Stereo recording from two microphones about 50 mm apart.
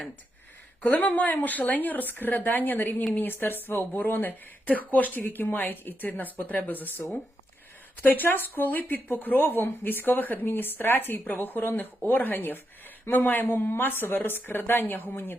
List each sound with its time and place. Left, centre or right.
0.8 s speech: left
8.0 s speech: left